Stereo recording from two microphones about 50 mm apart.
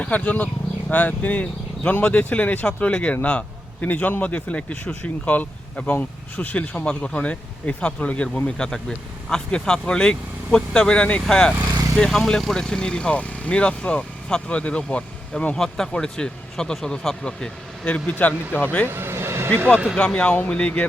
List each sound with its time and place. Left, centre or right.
0.0 s speech: left
6.7 s speech: centre
15.5 s speech: centre
17.8 s speech: left
18.9 s vehicle: right
20.0 s speech: centre